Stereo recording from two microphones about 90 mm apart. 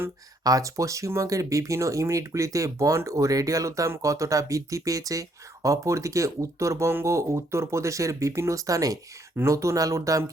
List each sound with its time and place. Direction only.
0.4 s speech: 40° right (ahead or behind)
9.3 s speech: 30° right (ahead or behind)